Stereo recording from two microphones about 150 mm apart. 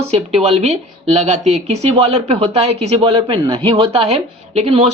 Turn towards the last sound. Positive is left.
turn(degrees=-45)  # may be behind; listen again after turning